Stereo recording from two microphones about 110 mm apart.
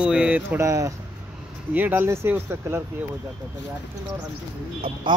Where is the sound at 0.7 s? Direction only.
30° right (ahead or behind).